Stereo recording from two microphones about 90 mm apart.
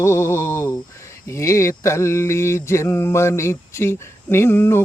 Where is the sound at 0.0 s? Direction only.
30° left (ahead or behind).